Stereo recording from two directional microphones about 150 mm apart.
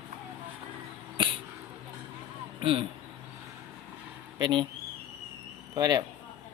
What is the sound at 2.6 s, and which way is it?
Speech, 35° right (ahead or behind).